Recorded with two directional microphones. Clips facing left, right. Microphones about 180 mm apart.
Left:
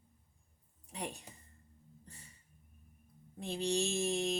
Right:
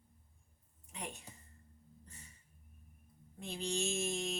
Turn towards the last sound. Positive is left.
turn(degrees=35)  # may be behind; listen again after turning